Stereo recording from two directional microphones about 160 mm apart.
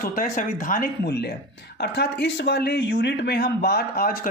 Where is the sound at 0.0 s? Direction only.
55° left (ahead or behind).